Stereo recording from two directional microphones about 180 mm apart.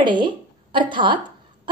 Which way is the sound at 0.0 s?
25° right (ahead or behind).